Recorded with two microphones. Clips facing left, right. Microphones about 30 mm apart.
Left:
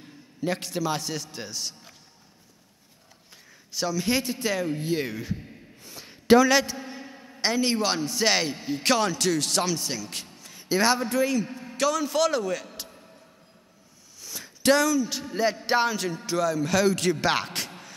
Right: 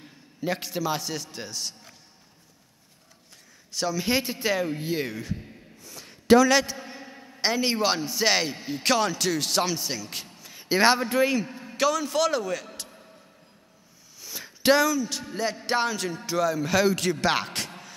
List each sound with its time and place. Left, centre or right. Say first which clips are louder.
0.0 s a man's voice: left 1 dB; centre
3.9 s speech: even; centre
4.9 s a man's voice: left 1 dB; centre
5.9 s a sound: even; centre
6.5 s a man's voice: even; centre
10.7 s a man's voice: right 2 dB; right
11.7 s a man's voice: right 1 dB; centre
14.2 s a sound: even; centre
15.0 s a man's voice: left 3 dB; centre